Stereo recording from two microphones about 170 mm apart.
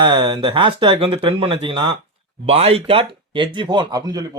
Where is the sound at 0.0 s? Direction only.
25° right (ahead or behind).